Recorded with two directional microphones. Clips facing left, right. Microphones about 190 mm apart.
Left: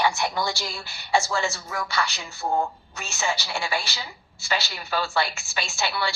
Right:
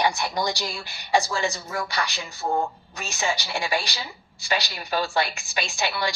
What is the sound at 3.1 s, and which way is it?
A woman's voice, 15° right (ahead or behind).